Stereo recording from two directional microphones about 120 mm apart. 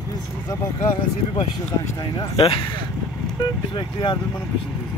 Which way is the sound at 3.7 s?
40° left (ahead or behind).